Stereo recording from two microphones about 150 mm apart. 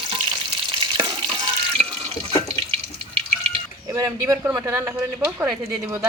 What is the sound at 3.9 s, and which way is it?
Speech, 20° right (ahead or behind).